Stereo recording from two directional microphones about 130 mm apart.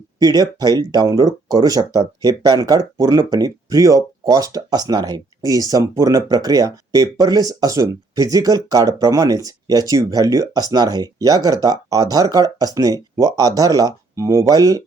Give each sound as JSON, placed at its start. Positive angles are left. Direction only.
{"t": 0.2, "sound": "speech", "side_deg": -30}